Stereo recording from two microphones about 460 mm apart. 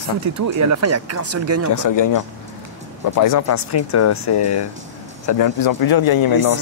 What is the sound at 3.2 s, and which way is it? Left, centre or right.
Speech, left.